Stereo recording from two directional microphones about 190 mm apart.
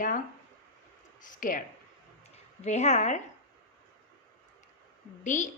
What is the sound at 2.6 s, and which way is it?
Speech, 35° left (ahead or behind).